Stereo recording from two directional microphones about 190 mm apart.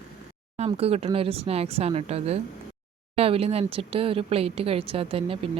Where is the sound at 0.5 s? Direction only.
35° right (ahead or behind).